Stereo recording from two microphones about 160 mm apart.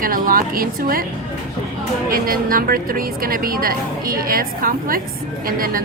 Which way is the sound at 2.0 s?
65° right (ahead or behind).